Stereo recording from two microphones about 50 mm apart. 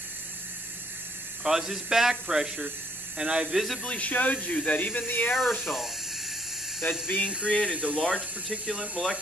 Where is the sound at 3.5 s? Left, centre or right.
Centre.